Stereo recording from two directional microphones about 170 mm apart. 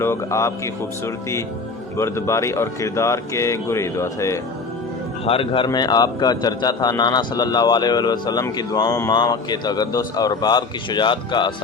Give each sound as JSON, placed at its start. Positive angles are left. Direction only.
{"t": 0.0, "sound": "speech", "side_deg": 15}
{"t": 5.2, "sound": "a man's voice", "side_deg": 35}